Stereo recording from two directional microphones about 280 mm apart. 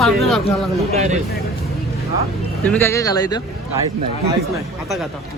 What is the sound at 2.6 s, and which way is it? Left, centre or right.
Speech, centre.